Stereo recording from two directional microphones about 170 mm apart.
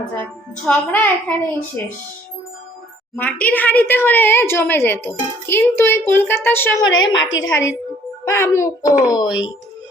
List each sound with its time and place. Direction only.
0.2 s a woman's voice: 10° left (ahead or behind)
3.2 s a woman's voice: 10° left (ahead or behind)
6.8 s a woman's voice: 25° left (ahead or behind)